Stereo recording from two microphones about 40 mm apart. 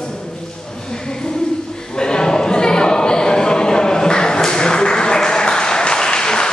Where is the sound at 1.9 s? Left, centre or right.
Centre.